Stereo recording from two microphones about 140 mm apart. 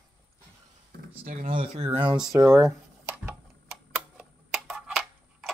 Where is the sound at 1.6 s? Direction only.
45° right (ahead or behind).